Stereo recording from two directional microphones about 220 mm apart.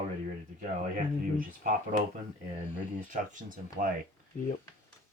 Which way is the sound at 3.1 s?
35° right (ahead or behind).